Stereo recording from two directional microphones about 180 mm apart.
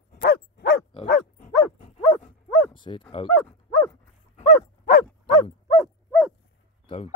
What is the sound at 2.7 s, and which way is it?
Bow-wow, 25° left (ahead or behind).